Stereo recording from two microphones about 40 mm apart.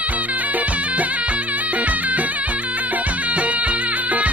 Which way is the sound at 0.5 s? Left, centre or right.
Right.